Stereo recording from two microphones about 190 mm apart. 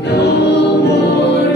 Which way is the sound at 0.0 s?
65° left (ahead or behind).